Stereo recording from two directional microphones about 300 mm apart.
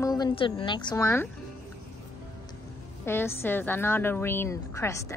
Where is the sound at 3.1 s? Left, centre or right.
Centre.